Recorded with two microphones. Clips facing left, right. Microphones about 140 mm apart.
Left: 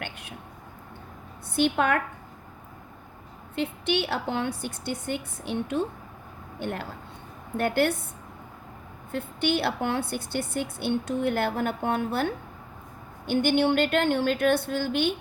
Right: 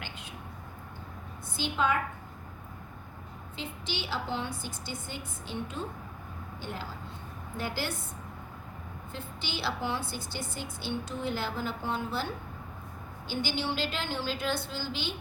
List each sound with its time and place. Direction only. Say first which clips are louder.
0.0 s a sound: left 5 dB; 65° left (ahead or behind)
1.5 s a woman's voice: left 6 dB; 65° left (ahead or behind)
3.5 s a woman's voice: left 12 dB; 65° left (ahead or behind)
9.1 s a woman's voice: left 13 dB; 60° left (ahead or behind)